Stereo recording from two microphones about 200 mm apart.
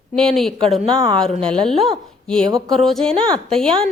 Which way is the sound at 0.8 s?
25° right (ahead or behind).